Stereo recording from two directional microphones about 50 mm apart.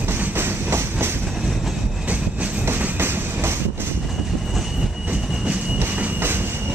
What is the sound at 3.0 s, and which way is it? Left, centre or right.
Train, right.